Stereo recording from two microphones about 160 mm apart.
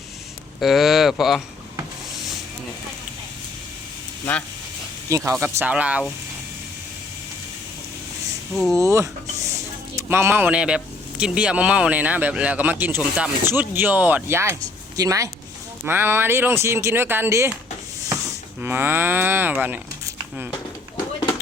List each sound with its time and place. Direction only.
0.6 s speech: centre (ahead or behind)
5.0 s speech: 20° right (ahead or behind)
8.7 s speech: 20° right (ahead or behind)
18.6 s speech: 15° right (ahead or behind)
19.6 s a sound: 10° right (ahead or behind)